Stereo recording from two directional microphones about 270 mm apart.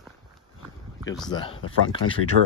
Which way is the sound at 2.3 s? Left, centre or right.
Right.